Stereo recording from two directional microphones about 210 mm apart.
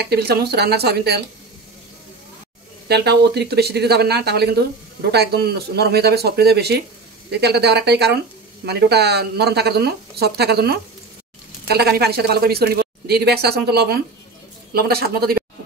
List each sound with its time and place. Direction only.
0.0 s speech: 50° right (ahead or behind)
2.9 s speech: 50° right (ahead or behind)